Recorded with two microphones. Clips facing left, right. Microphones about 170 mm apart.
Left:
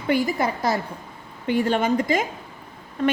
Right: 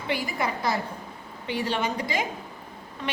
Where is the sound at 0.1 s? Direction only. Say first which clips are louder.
Left 7 dB; 45° left (ahead or behind).